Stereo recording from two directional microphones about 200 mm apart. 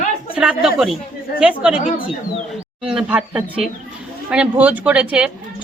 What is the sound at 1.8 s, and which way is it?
Speech, 40° left (ahead or behind).